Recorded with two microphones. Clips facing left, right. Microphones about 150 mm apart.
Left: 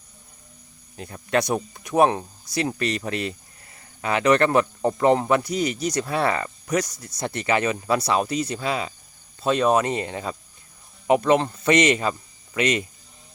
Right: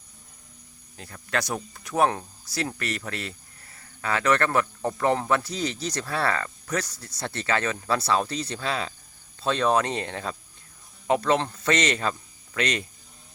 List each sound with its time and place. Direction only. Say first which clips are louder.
0.9 s speech: left 6 dB; 20° left (ahead or behind)